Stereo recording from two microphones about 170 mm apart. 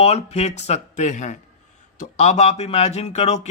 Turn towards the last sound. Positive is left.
turn(degrees=40)  # may be behind; listen again after turning